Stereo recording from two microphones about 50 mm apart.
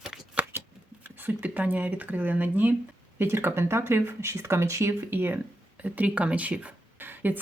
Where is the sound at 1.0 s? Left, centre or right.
Right.